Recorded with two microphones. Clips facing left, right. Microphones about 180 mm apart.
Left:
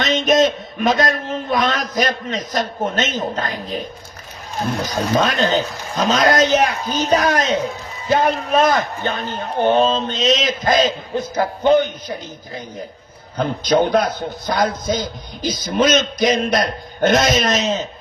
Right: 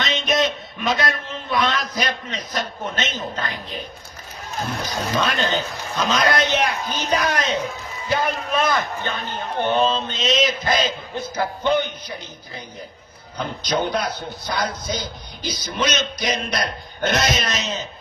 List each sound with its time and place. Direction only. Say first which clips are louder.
0.0 s a man's voice: left 6 dB; 45° left (ahead or behind)
5.1 s a man's voice: left 5 dB; 40° left (ahead or behind)
13.3 s a man's voice: left 7 dB; 50° left (ahead or behind)